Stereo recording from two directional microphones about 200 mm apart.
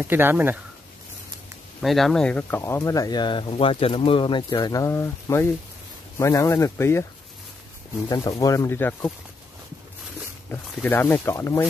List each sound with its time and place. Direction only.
0.0 s speech: 10° right (ahead or behind)
1.8 s speech: centre (ahead or behind)
8.1 s speech: 20° left (ahead or behind)
10.5 s speech: 5° left (ahead or behind)